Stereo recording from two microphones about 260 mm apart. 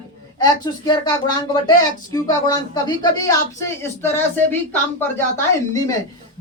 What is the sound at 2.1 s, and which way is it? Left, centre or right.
A woman's voice, centre.